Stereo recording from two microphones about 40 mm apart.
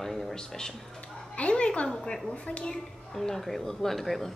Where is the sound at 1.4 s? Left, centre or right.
Left.